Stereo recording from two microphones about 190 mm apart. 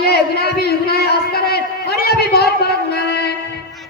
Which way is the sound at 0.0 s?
55° left (ahead or behind).